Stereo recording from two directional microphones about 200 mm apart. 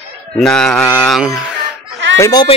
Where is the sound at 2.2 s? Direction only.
20° left (ahead or behind).